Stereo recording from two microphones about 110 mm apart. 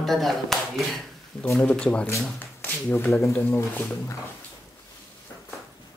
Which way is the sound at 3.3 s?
20° left (ahead or behind).